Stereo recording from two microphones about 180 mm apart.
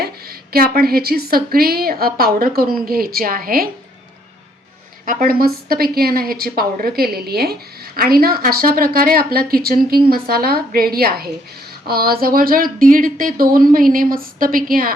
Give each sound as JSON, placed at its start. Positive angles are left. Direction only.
{"t": 0.5, "sound": "a woman's voice", "side_deg": -55}
{"t": 5.0, "sound": "a woman's voice", "side_deg": -50}